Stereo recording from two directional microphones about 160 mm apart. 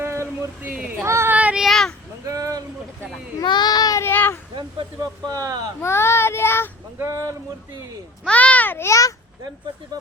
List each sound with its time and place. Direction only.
0.0 s a sound: 15° right (ahead or behind)
0.7 s speech: 5° right (ahead or behind)
1.0 s child singing: 15° right (ahead or behind); by 2.0 s 5° left (ahead or behind)
2.2 s a sound: 20° right (ahead or behind)
3.4 s child singing: 25° left (ahead or behind)
4.5 s speech: 25° right (ahead or behind)
5.8 s a child's voice: 15° left (ahead or behind)
7.0 s speech: 20° right (ahead or behind)
8.2 s a child's voice: 10° left (ahead or behind)